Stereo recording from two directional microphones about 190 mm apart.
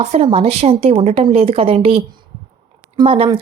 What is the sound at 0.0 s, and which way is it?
Speech, 35° right (ahead or behind).